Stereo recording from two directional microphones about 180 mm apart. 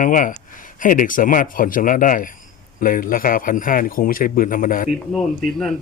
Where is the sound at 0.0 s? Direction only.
45° left (ahead or behind).